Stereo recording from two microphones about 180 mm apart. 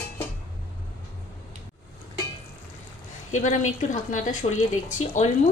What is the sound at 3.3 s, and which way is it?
A woman's voice, 45° left (ahead or behind).